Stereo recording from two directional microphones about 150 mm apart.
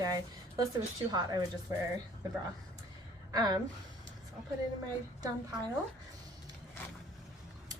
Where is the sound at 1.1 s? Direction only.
25° right (ahead or behind).